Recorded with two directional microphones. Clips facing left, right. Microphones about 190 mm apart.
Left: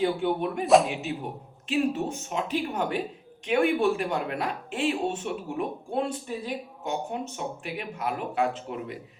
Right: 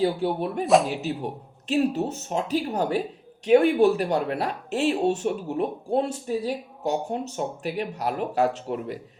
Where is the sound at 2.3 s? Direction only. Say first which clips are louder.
Right 4 dB; 40° right (ahead or behind).